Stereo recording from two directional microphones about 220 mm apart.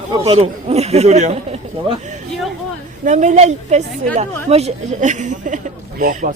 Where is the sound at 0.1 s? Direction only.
25° right (ahead or behind).